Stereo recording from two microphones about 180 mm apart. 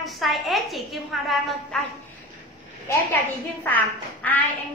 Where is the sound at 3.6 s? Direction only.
10° left (ahead or behind).